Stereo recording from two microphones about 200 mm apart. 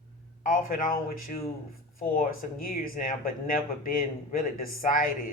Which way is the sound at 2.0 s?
45° left (ahead or behind).